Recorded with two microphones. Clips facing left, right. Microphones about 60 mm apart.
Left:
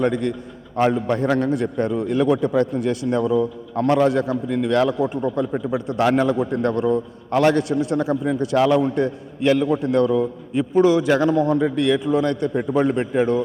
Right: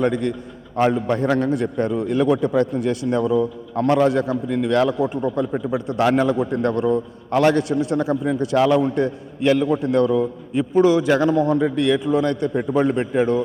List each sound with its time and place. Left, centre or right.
0.0 s a man's voice: right
3.1 s a man's voice: right
4.9 s a man's voice: right
6.0 s a man's voice: right
6.3 s a man's voice: right
8.0 s a man's voice: right
8.4 s a man's voice: right